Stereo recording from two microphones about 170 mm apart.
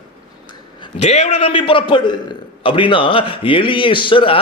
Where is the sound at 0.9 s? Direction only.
40° left (ahead or behind).